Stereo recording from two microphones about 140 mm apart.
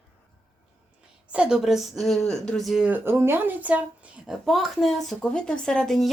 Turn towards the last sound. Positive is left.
turn(degrees=5)  # may be behind; listen again after turning